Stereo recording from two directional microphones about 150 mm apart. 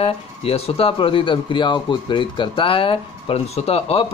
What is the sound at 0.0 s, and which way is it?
Speech, 40° left (ahead or behind).